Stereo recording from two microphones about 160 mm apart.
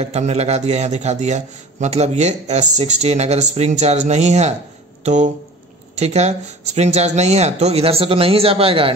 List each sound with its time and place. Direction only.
0.0 s a man's voice: 40° right (ahead or behind)